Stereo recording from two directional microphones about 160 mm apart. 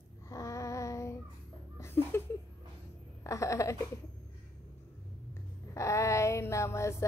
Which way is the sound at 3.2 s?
20° left (ahead or behind).